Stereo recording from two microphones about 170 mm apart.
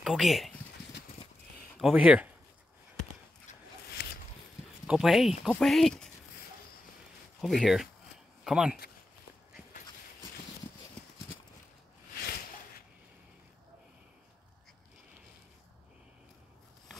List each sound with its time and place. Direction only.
0.0 s speech: centre (ahead or behind)
1.8 s speech: 5° right (ahead or behind)
4.0 s a sound: 70° left (ahead or behind)
4.8 s speech: 5° right (ahead or behind)
7.4 s speech: centre (ahead or behind)